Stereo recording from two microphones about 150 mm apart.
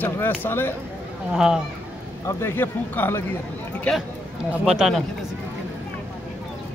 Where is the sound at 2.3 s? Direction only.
15° left (ahead or behind); by 5.0 s centre (ahead or behind).